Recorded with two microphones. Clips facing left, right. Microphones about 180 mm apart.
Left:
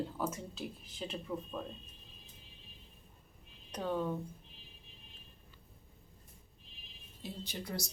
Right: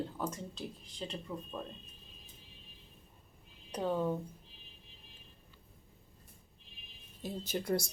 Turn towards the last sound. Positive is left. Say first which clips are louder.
# right 7 dB
turn(degrees=-50)  # may be behind; listen again after turning